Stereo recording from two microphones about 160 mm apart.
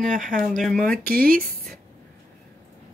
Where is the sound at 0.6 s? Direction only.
5° left (ahead or behind).